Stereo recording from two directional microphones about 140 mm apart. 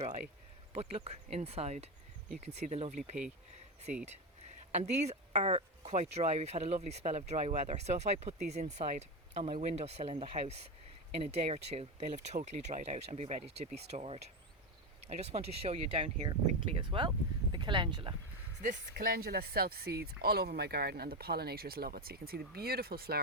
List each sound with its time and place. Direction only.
0.7 s speech: 45° right (ahead or behind)
4.7 s speech: 55° right (ahead or behind); by 18.1 s 35° right (ahead or behind)
18.6 s speech: 75° right (ahead or behind)